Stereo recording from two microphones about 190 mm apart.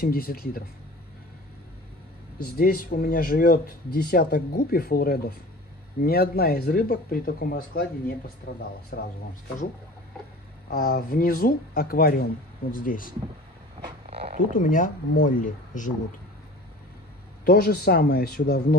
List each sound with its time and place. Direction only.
0.0 s speech: 50° left (ahead or behind)
2.4 s speech: 50° left (ahead or behind)
8.9 s speech: 50° left (ahead or behind)
10.7 s speech: 50° left (ahead or behind)
14.0 s a sound: 45° right (ahead or behind)
14.5 s speech: 40° left (ahead or behind)
17.5 s speech: 55° left (ahead or behind)